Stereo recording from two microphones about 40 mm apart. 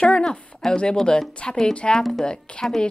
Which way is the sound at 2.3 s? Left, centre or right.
Left.